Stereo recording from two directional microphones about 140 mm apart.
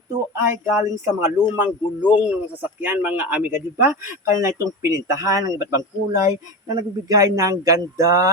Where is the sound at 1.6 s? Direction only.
10° right (ahead or behind).